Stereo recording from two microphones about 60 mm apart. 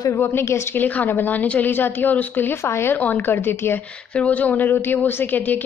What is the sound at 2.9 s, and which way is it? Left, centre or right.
Speech, left.